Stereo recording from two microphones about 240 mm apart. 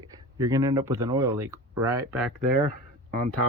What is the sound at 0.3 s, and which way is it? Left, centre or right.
Speech, centre.